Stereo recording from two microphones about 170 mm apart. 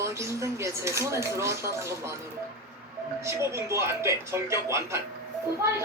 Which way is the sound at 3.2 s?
15° right (ahead or behind).